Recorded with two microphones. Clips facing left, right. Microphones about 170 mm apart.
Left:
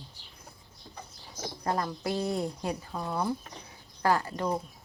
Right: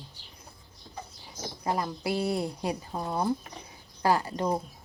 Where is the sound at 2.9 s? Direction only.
25° right (ahead or behind).